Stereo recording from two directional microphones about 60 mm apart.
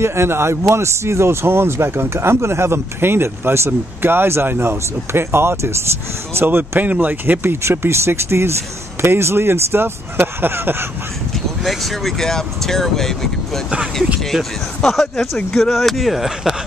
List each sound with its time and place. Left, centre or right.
0.0 s speech: right
7.6 s speech: right
11.6 s speech: centre
14.3 s speech: centre